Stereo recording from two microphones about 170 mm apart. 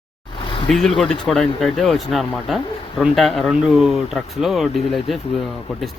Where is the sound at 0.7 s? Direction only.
Centre (ahead or behind).